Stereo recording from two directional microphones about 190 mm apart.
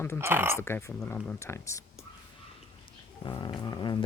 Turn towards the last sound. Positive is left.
turn(degrees=20)  # may be behind; listen again after turning